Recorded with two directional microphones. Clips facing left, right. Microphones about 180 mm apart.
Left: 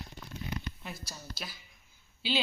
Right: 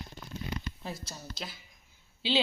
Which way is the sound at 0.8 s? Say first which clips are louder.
Right 4 dB; 25° right (ahead or behind).